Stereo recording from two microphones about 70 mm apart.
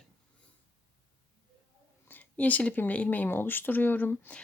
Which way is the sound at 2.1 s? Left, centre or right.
Left.